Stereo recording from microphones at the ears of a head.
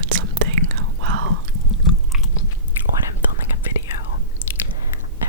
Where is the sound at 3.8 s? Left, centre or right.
Left.